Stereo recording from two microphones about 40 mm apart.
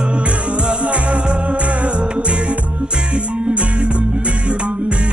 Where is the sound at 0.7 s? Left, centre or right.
Right.